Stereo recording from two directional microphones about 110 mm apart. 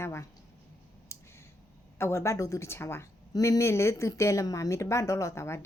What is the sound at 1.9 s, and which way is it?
A woman's voice, 25° left (ahead or behind).